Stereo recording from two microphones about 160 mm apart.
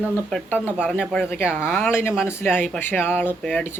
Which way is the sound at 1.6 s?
15° left (ahead or behind).